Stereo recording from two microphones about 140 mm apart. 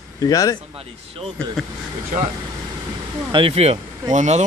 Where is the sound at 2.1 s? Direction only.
55° right (ahead or behind).